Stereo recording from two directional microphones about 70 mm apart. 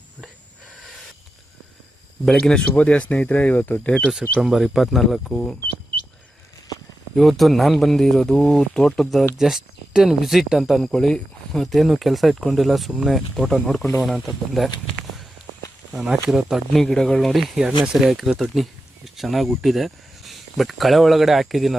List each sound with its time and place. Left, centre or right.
2.2 s speech: centre
2.7 s speech: centre
4.1 s speech: centre
7.2 s speech: centre
15.9 s speech: centre
16.7 s speech: centre